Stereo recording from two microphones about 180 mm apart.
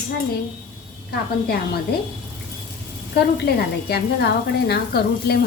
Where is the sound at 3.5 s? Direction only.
65° left (ahead or behind).